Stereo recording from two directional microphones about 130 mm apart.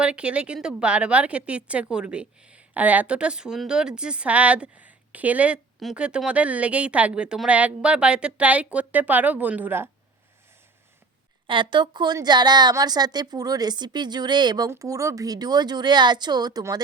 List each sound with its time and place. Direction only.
0.0 s a woman's voice: 10° right (ahead or behind)
11.4 s a woman's voice: 40° right (ahead or behind)